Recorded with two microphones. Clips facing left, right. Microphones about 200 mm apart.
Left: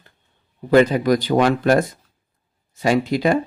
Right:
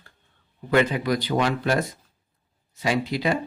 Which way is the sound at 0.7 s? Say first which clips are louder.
Left 7 dB; 40° left (ahead or behind).